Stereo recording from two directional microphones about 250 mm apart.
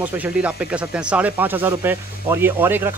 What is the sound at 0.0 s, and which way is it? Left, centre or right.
Speech, centre.